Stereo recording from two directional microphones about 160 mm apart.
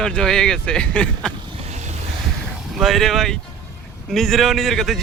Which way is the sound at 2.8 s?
Centre (ahead or behind).